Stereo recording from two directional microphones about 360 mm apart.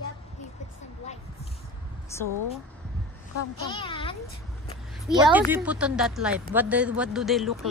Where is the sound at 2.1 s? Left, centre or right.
Centre.